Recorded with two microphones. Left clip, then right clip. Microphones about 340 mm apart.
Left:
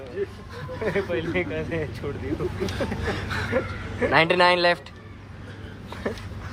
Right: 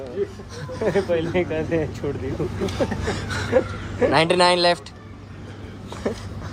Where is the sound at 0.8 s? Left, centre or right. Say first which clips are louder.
Right 5 dB; right.